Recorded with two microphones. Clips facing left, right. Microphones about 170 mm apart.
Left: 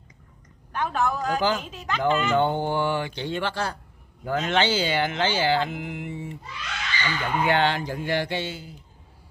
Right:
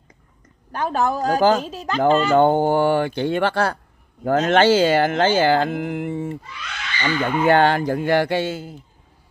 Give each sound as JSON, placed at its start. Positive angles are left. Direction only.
{"t": 0.7, "sound": "speech", "side_deg": -35}